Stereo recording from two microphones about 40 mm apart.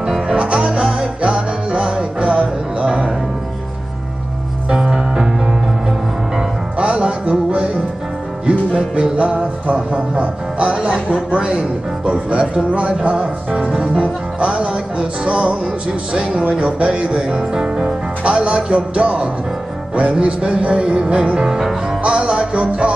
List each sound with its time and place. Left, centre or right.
0.0 s music: centre
0.4 s music: right
4.6 s music: centre
6.8 s music: right
10.7 s music: centre
13.6 s music: centre
21.5 s music: centre
22.0 s music: right